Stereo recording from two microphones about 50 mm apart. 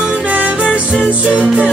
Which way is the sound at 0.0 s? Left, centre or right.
Right.